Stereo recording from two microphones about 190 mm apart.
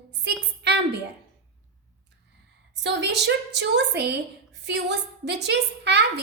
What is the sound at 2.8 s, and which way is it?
A woman's voice, 65° right (ahead or behind).